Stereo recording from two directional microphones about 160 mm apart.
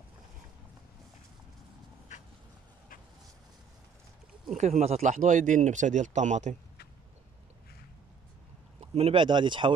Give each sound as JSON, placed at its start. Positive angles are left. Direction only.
{"t": 4.6, "sound": "speech", "side_deg": -45}
{"t": 8.9, "sound": "speech", "side_deg": -35}